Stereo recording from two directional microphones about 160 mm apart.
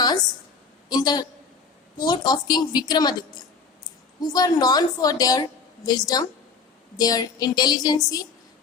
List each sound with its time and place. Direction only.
0.9 s a woman's voice: 25° left (ahead or behind)